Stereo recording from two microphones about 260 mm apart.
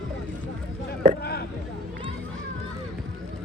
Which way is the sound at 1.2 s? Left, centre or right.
Left.